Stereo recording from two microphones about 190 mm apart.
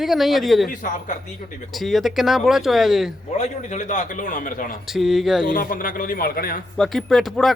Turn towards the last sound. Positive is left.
turn(degrees=0)  # may be behind; listen again after turning